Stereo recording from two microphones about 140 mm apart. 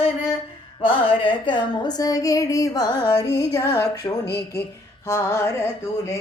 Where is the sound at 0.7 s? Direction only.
40° left (ahead or behind); by 5.5 s 20° left (ahead or behind).